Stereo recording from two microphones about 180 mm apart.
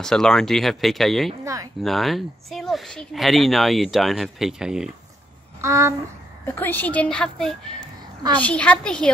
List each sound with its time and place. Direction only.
0.0 s speech: 5° left (ahead or behind)
1.4 s speech: 20° right (ahead or behind)
1.8 s speech: centre (ahead or behind)
5.6 s a sound: 15° right (ahead or behind)
6.4 s a woman's voice: 10° left (ahead or behind)